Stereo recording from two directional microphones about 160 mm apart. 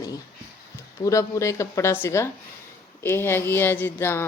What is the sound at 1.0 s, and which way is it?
Speech, 20° left (ahead or behind).